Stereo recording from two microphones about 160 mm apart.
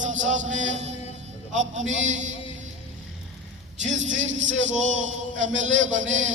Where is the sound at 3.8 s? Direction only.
50° right (ahead or behind).